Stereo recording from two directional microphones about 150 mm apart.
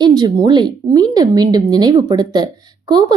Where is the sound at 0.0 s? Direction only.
30° right (ahead or behind).